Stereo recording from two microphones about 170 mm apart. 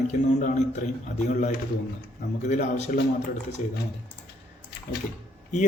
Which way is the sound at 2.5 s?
45° left (ahead or behind).